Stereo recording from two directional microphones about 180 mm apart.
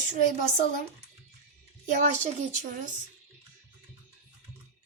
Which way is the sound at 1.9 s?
45° right (ahead or behind).